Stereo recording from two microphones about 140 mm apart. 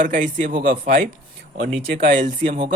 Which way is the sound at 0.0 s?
70° right (ahead or behind).